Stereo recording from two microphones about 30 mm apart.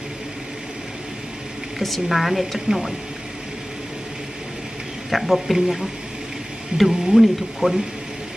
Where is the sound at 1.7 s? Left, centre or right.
Centre.